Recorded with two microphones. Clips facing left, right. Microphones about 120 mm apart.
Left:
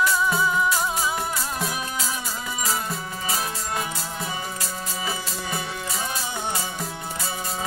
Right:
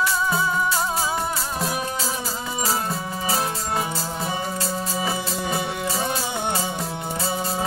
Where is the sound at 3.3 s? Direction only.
30° right (ahead or behind).